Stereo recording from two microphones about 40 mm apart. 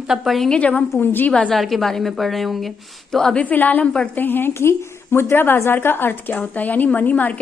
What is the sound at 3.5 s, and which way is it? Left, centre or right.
Speech, left.